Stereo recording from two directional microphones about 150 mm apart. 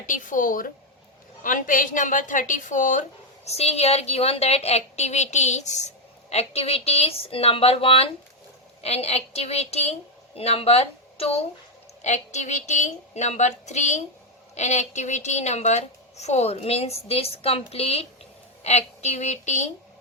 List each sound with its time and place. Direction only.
0.0 s a woman's voice: 60° left (ahead or behind)